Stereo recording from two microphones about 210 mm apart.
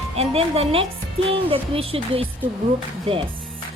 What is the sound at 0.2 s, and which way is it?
A woman's voice, 30° right (ahead or behind).